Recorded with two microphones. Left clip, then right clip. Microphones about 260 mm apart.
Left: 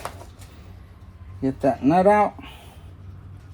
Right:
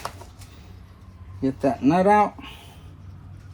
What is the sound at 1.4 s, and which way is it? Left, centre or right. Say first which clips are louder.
Speech: left 1 dB; centre.